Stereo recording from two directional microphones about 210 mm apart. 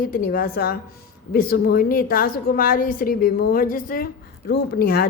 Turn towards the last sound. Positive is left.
turn(degrees=45)  # may be behind; listen again after turning